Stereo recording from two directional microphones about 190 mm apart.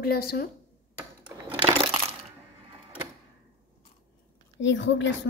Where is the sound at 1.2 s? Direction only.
25° right (ahead or behind).